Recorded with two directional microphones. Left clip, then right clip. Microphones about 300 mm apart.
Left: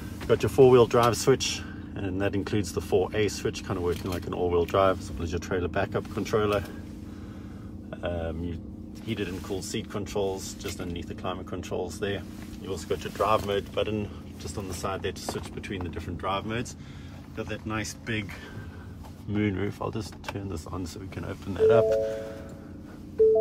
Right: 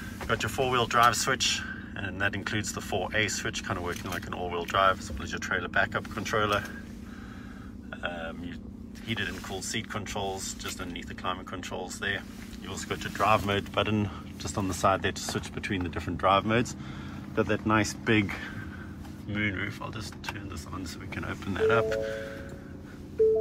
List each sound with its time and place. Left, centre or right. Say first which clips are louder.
0.3 s speech: left 9 dB; left
8.0 s speech: left 3 dB; left; by 18.4 s centre
19.3 s speech: left 2 dB; centre